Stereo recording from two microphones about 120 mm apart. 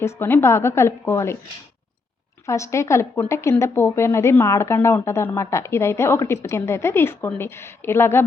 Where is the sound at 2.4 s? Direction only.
25° left (ahead or behind).